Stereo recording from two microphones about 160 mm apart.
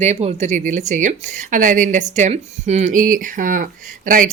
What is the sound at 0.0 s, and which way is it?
Speech, 40° right (ahead or behind).